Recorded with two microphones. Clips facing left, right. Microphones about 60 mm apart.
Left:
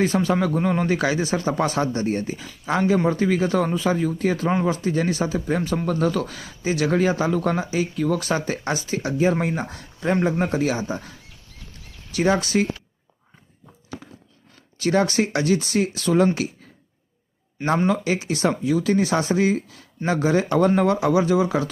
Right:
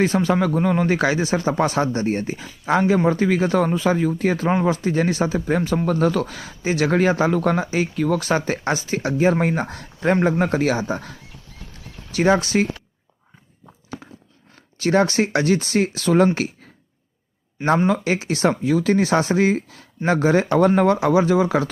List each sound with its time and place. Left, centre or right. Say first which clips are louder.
0.0 s speech: right 2 dB; right
10.8 s speech: right 3 dB; right
12.1 s speech: right 2 dB; right
14.5 s speech: right 2 dB; right
17.8 s speech: right 2 dB; right